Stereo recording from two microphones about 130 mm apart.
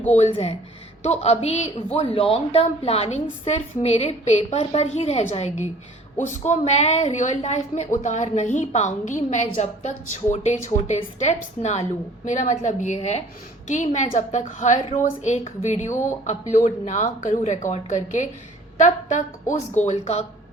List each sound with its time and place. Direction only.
0.1 s a woman's voice: 60° left (ahead or behind)
13.7 s a woman's voice: 70° left (ahead or behind)